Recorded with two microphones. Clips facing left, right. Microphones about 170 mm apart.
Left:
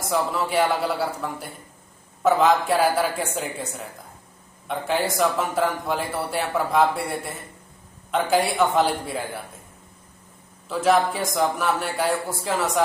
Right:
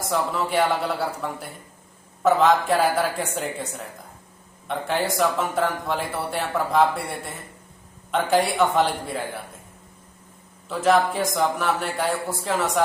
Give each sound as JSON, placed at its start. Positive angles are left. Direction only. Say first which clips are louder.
{"t": 0.1, "sound": "a man's voice", "louder": "left 1 dB", "side_deg": 0}
{"t": 4.7, "sound": "a man's voice", "louder": "left 1 dB", "side_deg": 0}
{"t": 10.7, "sound": "a man's voice", "louder": "even", "side_deg": 0}